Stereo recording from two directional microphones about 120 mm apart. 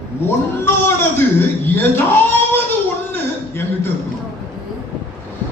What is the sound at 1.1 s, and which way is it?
Speech, 20° left (ahead or behind).